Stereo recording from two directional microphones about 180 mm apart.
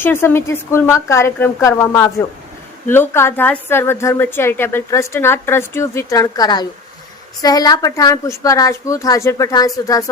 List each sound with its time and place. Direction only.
0.0 s a woman's voice: 10° left (ahead or behind)